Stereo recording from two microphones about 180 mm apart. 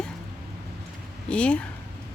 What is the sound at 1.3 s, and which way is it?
Speech, 5° left (ahead or behind).